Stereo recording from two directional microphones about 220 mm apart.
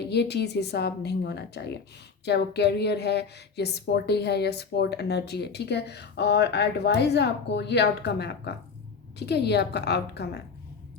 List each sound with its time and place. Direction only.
0.1 s speech: 50° left (ahead or behind)